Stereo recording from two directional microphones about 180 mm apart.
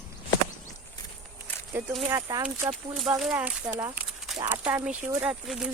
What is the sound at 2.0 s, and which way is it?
Speech, 20° right (ahead or behind).